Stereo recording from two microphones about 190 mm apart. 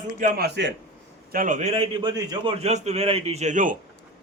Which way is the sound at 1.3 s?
45° right (ahead or behind).